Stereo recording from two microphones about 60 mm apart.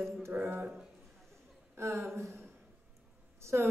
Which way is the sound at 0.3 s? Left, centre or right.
Right.